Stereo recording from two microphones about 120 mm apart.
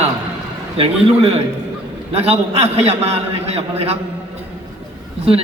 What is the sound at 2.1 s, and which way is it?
A man's voice, 55° right (ahead or behind).